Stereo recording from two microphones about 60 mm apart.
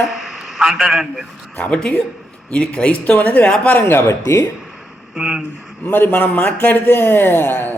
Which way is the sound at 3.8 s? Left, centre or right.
Left.